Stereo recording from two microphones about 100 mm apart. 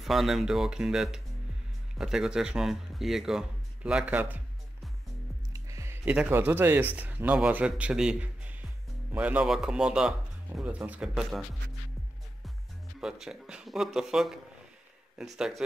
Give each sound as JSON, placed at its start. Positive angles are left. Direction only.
{"t": 0.0, "sound": "speech", "side_deg": 0}
{"t": 5.5, "sound": "music", "side_deg": -30}
{"t": 6.0, "sound": "a man's voice", "side_deg": -15}
{"t": 13.0, "sound": "speech", "side_deg": -5}